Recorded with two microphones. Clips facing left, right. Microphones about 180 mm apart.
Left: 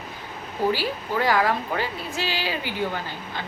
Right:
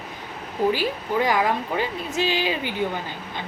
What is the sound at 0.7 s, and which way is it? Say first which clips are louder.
A woman's voice: right 2 dB; 20° right (ahead or behind).